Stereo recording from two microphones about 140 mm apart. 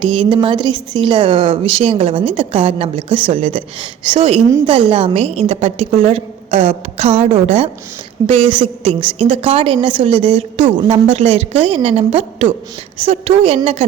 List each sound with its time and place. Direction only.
0.0 s a woman's voice: 40° right (ahead or behind)